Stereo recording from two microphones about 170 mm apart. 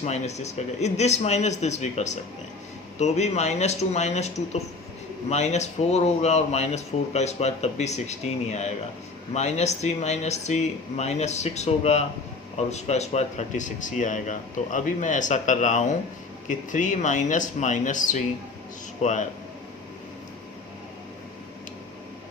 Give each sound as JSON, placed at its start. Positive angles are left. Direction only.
{"t": 0.0, "sound": "speech", "side_deg": 40}